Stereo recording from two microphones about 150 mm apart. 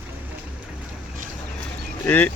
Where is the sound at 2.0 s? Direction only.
10° left (ahead or behind).